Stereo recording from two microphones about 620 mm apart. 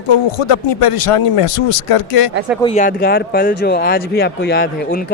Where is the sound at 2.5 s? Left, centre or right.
Centre.